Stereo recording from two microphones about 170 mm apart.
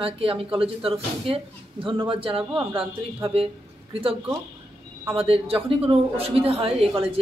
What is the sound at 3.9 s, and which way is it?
A woman's voice, 35° right (ahead or behind).